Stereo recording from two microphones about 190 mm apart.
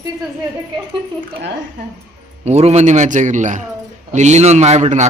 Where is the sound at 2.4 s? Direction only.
35° right (ahead or behind).